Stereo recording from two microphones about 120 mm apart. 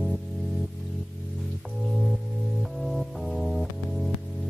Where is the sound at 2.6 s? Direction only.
Centre (ahead or behind).